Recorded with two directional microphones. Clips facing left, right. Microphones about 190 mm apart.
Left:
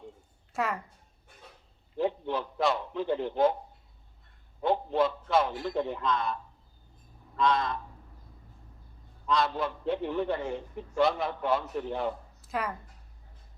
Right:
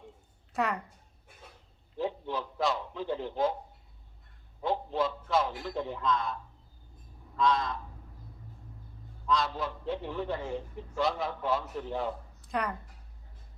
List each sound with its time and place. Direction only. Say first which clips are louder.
0.5 s a woman's voice: even; centre (ahead or behind)
2.0 s a man's voice: left 4 dB; 60° left (ahead or behind)
4.6 s a man's voice: left 4 dB; 60° left (ahead or behind)
7.3 s a man's voice: left 1 dB; 60° left (ahead or behind)
9.3 s a man's voice: left 2 dB; 60° left (ahead or behind)
12.4 s a sound: right 1 dB; 5° left (ahead or behind)